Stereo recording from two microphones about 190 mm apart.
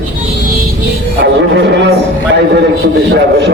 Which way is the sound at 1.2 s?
65° right (ahead or behind).